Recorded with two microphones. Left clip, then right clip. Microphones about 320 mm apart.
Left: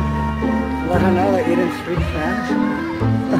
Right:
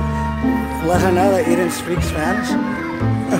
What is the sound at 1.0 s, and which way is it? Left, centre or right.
Speech, right.